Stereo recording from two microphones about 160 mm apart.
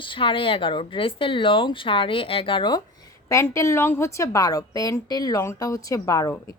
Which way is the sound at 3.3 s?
20° left (ahead or behind).